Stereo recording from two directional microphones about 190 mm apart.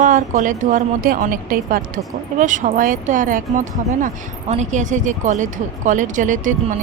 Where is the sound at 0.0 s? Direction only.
45° right (ahead or behind).